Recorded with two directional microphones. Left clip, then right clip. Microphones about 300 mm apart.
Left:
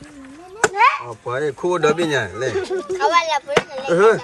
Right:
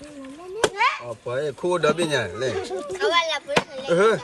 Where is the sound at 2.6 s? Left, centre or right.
Left.